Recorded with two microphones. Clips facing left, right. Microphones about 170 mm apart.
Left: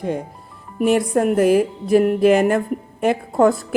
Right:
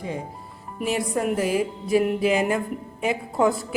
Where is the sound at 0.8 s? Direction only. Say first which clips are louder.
Left 8 dB; 55° left (ahead or behind).